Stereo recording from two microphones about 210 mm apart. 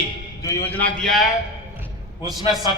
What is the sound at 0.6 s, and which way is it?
Speech, 10° left (ahead or behind).